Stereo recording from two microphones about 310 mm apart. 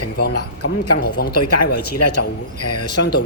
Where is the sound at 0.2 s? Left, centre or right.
Left.